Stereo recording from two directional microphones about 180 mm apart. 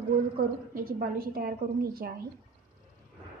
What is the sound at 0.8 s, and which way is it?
A woman's voice, 55° right (ahead or behind).